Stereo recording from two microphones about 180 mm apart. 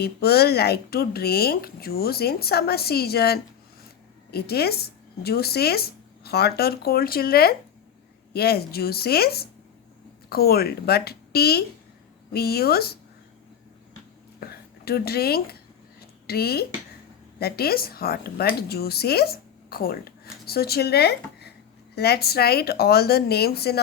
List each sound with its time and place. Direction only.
0.0 s speech: 60° left (ahead or behind)
14.3 s a sound: 60° left (ahead or behind)
16.2 s a woman's voice: 60° left (ahead or behind)